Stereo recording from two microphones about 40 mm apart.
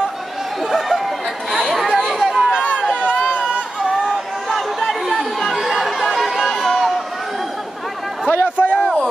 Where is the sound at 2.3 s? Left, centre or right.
Centre.